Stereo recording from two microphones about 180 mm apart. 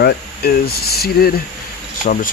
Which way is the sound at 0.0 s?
60° left (ahead or behind).